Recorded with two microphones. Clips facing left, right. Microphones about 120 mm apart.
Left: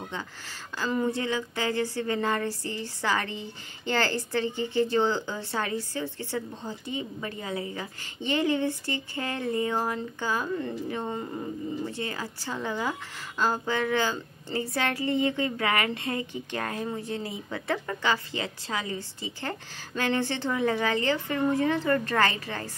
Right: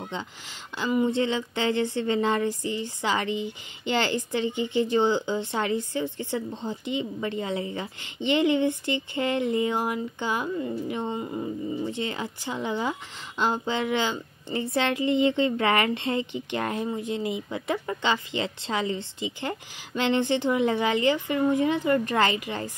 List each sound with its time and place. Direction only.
0.7 s speech: 15° right (ahead or behind)
11.8 s speech: 20° right (ahead or behind)